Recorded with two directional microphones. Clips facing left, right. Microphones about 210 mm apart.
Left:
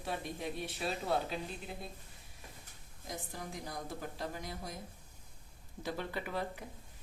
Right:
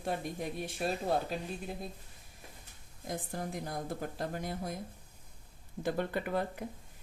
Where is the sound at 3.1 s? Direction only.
55° right (ahead or behind).